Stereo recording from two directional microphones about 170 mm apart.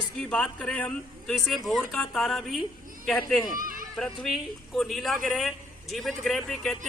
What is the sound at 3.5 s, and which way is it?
Chatter, 55° right (ahead or behind).